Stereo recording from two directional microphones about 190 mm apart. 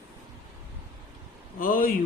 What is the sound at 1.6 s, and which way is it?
Speech, 45° left (ahead or behind).